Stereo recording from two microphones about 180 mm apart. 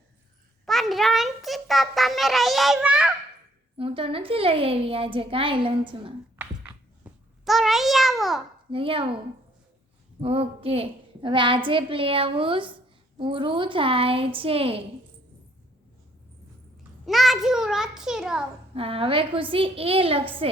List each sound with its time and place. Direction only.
0.6 s a child's voice: centre (ahead or behind)
3.8 s a woman's voice: 30° right (ahead or behind)
6.4 s a sound: 10° right (ahead or behind)
8.7 s a woman's voice: 30° right (ahead or behind)
17.1 s a child's voice: centre (ahead or behind)
18.7 s a woman's voice: 30° right (ahead or behind)